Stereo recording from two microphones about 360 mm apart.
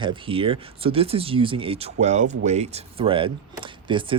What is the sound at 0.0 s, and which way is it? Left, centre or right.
Speech, centre.